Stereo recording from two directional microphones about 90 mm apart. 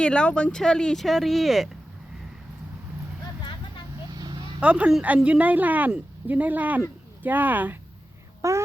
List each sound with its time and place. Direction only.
0.0 s speech: 10° left (ahead or behind)
4.1 s vehicle: 50° right (ahead or behind)
4.6 s speech: 15° right (ahead or behind)
8.4 s speech: 35° right (ahead or behind)